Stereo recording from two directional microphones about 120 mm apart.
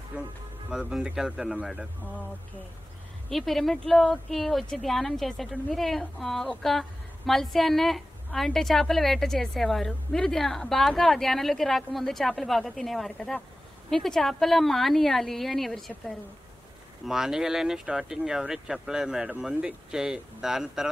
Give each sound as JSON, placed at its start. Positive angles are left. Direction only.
{"t": 0.1, "sound": "speech", "side_deg": -15}
{"t": 3.3, "sound": "speech", "side_deg": 0}
{"t": 17.0, "sound": "speech", "side_deg": -5}